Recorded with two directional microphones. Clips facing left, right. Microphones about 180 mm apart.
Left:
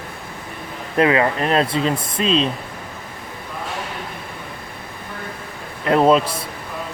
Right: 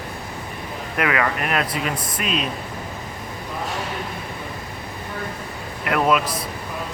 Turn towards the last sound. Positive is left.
turn(degrees=30)  # may be behind; listen again after turning